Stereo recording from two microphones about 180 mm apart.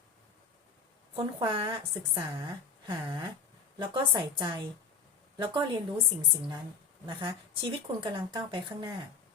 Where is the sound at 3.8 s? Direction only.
25° right (ahead or behind).